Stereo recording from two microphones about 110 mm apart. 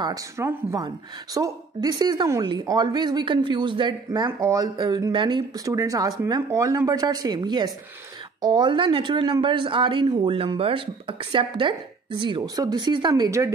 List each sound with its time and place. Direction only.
0.4 s speech: 25° right (ahead or behind); by 4.3 s 40° right (ahead or behind)
4.3 s speech: 30° right (ahead or behind); by 5.6 s 45° right (ahead or behind)
5.7 s speech: 30° right (ahead or behind)
13.1 s speech: 30° right (ahead or behind)